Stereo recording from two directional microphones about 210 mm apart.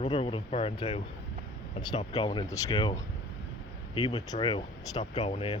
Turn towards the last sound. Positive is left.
turn(degrees=30)  # may be behind; listen again after turning